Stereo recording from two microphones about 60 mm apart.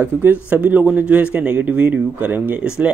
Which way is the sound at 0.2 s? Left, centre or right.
Right.